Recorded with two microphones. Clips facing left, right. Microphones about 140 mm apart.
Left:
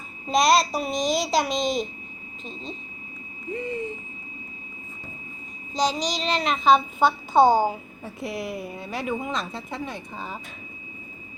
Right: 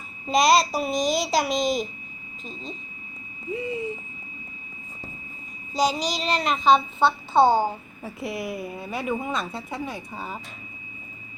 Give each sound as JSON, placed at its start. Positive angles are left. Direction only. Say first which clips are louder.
{"t": 0.3, "sound": "a woman's voice", "louder": "right 1 dB", "side_deg": 0}
{"t": 5.7, "sound": "a woman's voice", "louder": "right 1 dB", "side_deg": -5}
{"t": 7.3, "sound": "a woman's voice", "louder": "left 1 dB", "side_deg": 15}
{"t": 8.0, "sound": "a woman's voice", "louder": "right 1 dB", "side_deg": 0}